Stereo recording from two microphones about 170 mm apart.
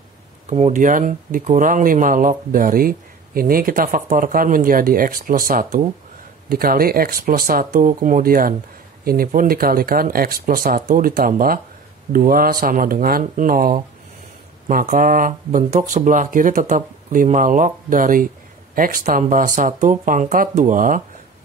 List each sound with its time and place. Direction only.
0.5 s speech: 40° right (ahead or behind)